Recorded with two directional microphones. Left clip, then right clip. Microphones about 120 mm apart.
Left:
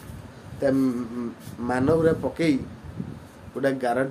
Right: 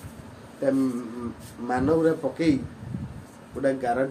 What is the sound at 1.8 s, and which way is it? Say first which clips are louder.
Speech: left 1 dB; 90° left.